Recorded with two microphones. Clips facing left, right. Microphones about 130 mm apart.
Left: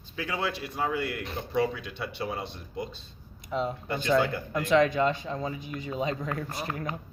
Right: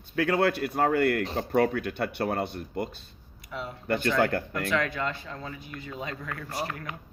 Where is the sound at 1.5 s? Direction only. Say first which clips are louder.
Right 3 dB; 55° right (ahead or behind).